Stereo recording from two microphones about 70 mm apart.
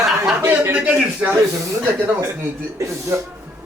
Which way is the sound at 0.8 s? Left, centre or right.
Centre.